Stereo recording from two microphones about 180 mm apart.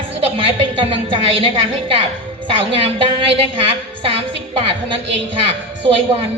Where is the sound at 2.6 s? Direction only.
30° right (ahead or behind).